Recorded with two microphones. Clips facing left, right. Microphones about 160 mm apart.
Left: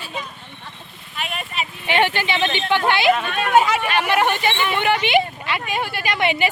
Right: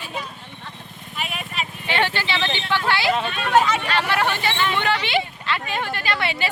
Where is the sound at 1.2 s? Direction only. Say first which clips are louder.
Left 2 dB; 5° right (ahead or behind).